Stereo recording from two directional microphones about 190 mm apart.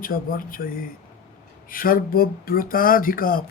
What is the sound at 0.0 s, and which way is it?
Speech, 50° left (ahead or behind).